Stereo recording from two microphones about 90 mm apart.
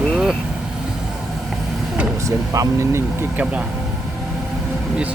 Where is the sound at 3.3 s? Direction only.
15° right (ahead or behind).